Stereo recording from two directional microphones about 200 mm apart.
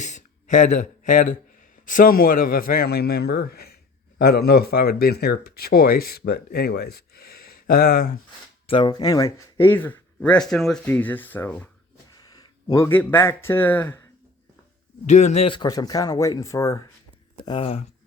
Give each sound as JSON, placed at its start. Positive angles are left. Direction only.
{"t": 0.0, "sound": "speech", "side_deg": 40}
{"t": 8.6, "sound": "speech", "side_deg": 25}
{"t": 12.1, "sound": "speech", "side_deg": 20}
{"t": 15.0, "sound": "speech", "side_deg": 35}